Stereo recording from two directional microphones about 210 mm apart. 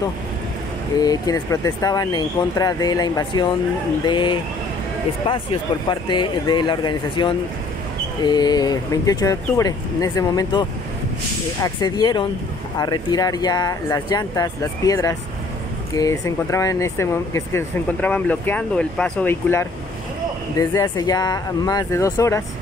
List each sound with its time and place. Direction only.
0.9 s speech: 20° left (ahead or behind)